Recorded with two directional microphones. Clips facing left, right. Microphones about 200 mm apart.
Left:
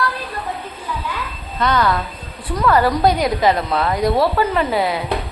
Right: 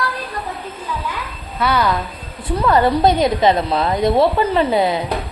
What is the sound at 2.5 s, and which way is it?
A woman's voice, 25° right (ahead or behind).